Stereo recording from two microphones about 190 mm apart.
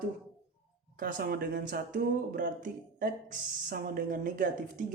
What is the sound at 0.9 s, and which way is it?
Speech, 50° right (ahead or behind).